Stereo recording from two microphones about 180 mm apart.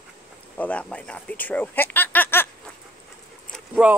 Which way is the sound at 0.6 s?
5° left (ahead or behind).